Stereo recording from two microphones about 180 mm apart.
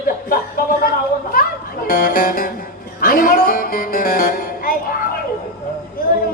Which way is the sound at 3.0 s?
50° left (ahead or behind).